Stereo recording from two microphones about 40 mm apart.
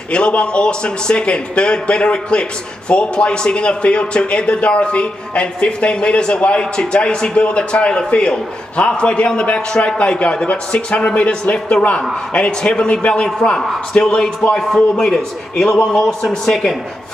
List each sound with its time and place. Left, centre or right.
0.1 s speech: left
13.6 s a man's voice: centre